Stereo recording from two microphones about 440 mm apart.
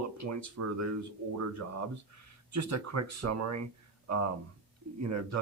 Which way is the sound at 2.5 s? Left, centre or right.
Right.